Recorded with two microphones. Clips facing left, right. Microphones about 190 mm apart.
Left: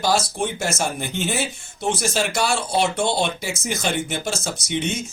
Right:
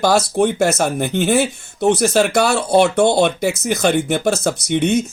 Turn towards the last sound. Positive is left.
turn(degrees=-60)  # may be behind; listen again after turning